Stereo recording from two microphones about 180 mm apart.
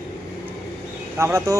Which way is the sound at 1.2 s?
15° right (ahead or behind).